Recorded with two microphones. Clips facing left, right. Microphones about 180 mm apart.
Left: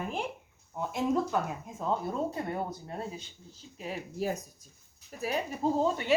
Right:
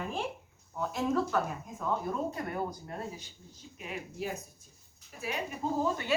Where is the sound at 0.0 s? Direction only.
20° left (ahead or behind); by 5.3 s 45° left (ahead or behind).